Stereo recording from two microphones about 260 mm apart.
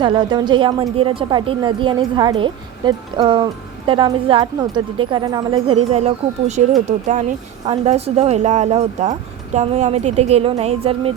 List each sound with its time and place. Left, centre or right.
0.0 s a woman's voice: centre